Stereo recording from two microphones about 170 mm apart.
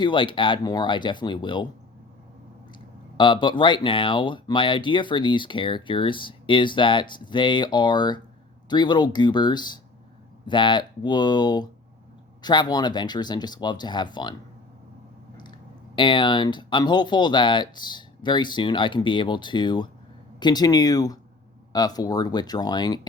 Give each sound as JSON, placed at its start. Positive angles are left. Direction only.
{"t": 0.0, "sound": "speech", "side_deg": 30}
{"t": 3.2, "sound": "speech", "side_deg": 30}
{"t": 16.0, "sound": "speech", "side_deg": 25}